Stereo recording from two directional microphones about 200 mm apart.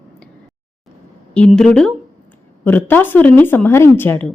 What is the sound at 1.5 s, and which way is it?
A woman's voice, centre (ahead or behind).